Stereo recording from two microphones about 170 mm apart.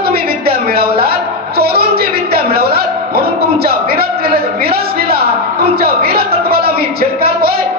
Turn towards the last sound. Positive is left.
turn(degrees=-65)  # may be behind; listen again after turning